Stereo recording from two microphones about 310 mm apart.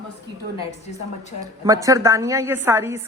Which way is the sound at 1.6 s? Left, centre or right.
Centre.